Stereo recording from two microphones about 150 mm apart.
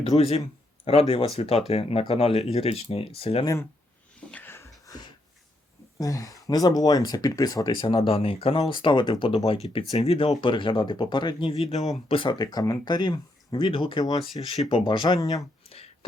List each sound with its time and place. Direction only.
0.2 s speech: 40° left (ahead or behind)
3.4 s speech: 20° left (ahead or behind)
4.3 s a sound: 10° left (ahead or behind)
6.0 s speech: 25° left (ahead or behind)
14.5 s speech: 40° left (ahead or behind)
15.6 s a sound: 40° left (ahead or behind)